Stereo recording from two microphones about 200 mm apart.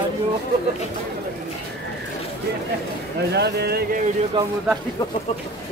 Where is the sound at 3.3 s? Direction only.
55° right (ahead or behind).